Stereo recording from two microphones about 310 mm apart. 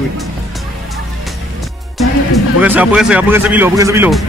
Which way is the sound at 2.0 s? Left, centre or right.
Centre.